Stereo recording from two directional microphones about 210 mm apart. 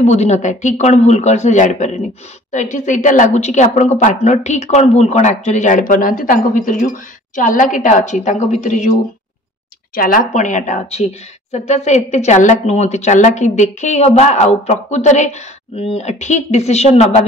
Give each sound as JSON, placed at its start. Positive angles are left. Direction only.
{"t": 0.0, "sound": "a woman's voice", "side_deg": 30}
{"t": 9.9, "sound": "a woman's voice", "side_deg": 40}